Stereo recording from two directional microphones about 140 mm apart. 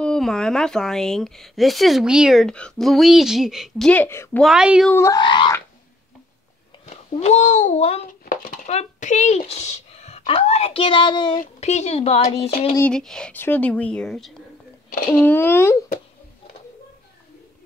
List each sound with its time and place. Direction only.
0.0 s a woman's voice: 5° left (ahead or behind)
4.4 s a woman's voice: 5° right (ahead or behind)
4.9 s speech: 20° left (ahead or behind)
5.2 s a sound: 35° left (ahead or behind)
6.9 s a child's voice: 50° left (ahead or behind); by 11.4 s 35° left (ahead or behind)
11.6 s speech: 50° left (ahead or behind)
12.9 s speech: 5° left (ahead or behind)
15.1 s speech: 15° left (ahead or behind)